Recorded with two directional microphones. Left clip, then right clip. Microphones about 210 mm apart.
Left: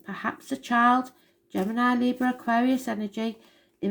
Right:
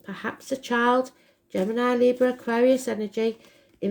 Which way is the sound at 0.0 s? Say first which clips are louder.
Left 1 dB; 25° right (ahead or behind).